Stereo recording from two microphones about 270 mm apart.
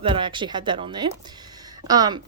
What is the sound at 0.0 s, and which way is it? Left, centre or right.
Speech, centre.